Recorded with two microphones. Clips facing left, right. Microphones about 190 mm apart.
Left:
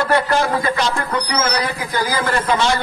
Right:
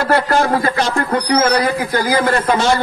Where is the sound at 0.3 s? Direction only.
45° right (ahead or behind).